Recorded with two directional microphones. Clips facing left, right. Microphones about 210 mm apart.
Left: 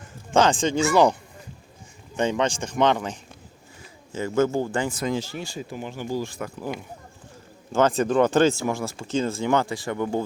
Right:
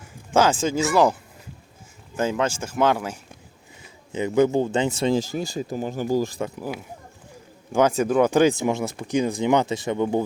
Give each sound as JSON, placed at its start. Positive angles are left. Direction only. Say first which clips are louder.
{"t": 0.3, "sound": "speech", "louder": "even", "side_deg": -5}
{"t": 2.1, "sound": "speech", "louder": "even", "side_deg": -5}
{"t": 4.1, "sound": "speech", "louder": "right 3 dB", "side_deg": -15}
{"t": 5.3, "sound": "speech", "louder": "right 6 dB", "side_deg": -40}
{"t": 6.6, "sound": "speech", "louder": "even", "side_deg": -5}